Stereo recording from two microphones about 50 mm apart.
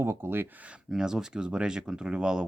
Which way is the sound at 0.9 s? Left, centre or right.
Centre.